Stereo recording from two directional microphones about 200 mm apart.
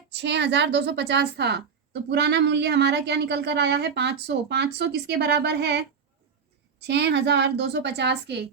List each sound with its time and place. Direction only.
0.1 s a woman's voice: 60° right (ahead or behind)
6.8 s a woman's voice: 60° right (ahead or behind)